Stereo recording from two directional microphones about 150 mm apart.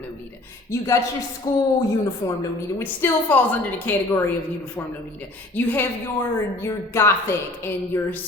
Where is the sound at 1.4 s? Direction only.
25° left (ahead or behind).